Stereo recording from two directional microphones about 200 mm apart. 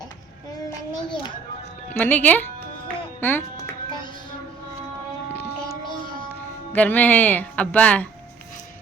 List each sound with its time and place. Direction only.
1.0 s a child's voice: 20° left (ahead or behind)
1.9 s speech: 10° left (ahead or behind)
3.2 s music: 10° left (ahead or behind)
6.7 s speech: 10° left (ahead or behind)